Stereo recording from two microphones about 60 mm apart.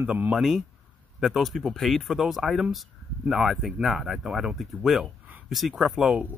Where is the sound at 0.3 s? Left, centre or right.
Centre.